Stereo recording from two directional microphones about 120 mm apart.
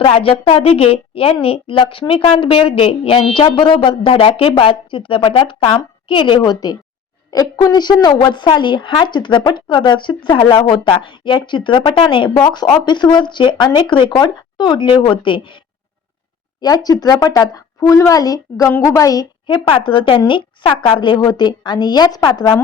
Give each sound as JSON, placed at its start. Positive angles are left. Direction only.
{"t": 0.0, "sound": "a woman's voice", "side_deg": 50}
{"t": 16.6, "sound": "a woman's voice", "side_deg": 30}